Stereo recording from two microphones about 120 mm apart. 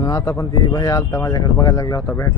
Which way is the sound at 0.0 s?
30° left (ahead or behind).